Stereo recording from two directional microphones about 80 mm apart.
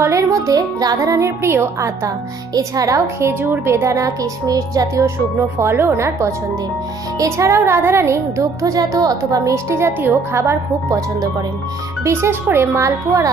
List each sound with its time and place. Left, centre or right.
0.0 s music: right
2.5 s music: right
3.8 s speech: right
5.4 s music: right
12.0 s music: right